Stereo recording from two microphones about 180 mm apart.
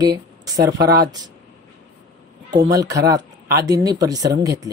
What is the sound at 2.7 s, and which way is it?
Speech, 20° right (ahead or behind).